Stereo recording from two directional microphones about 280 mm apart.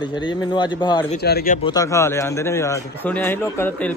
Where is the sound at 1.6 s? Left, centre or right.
Centre.